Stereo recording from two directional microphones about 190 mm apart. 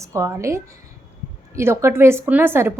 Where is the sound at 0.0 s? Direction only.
15° right (ahead or behind).